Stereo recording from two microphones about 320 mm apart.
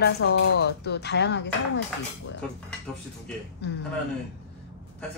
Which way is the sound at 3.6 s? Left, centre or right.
Left.